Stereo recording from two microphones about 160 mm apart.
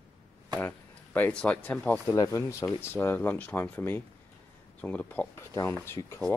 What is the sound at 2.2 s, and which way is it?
Speech, 20° left (ahead or behind).